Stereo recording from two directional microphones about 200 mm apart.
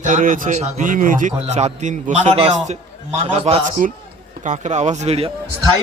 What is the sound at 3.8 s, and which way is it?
A man's voice, 45° right (ahead or behind).